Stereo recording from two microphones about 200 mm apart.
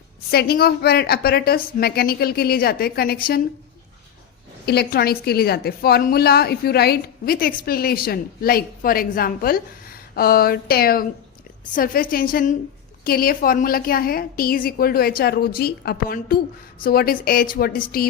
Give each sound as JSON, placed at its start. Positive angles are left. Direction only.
{"t": 0.3, "sound": "a woman's voice", "side_deg": 50}
{"t": 4.6, "sound": "a woman's voice", "side_deg": 55}